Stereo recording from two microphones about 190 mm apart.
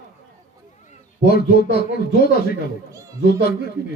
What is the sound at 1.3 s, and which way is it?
Speech, 55° left (ahead or behind).